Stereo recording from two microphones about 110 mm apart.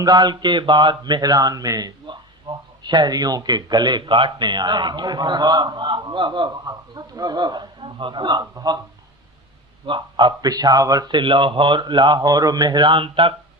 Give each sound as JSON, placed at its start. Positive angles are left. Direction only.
{"t": 0.0, "sound": "speech", "side_deg": -40}
{"t": 2.0, "sound": "speech", "side_deg": -45}
{"t": 9.8, "sound": "speech", "side_deg": -45}